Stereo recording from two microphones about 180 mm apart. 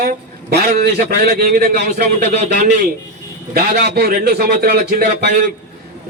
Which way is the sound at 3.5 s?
60° right (ahead or behind).